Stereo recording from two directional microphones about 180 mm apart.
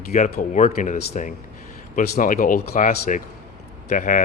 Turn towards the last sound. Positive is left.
turn(degrees=45)  # may be behind; listen again after turning